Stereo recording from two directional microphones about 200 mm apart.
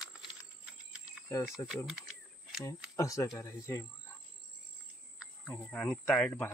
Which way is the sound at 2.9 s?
15° left (ahead or behind).